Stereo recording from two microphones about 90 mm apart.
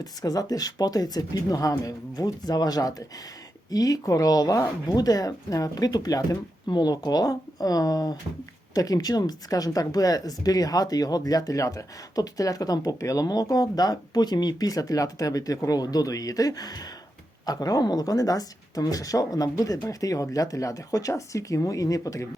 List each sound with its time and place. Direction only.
0.0 s speech: 45° left (ahead or behind)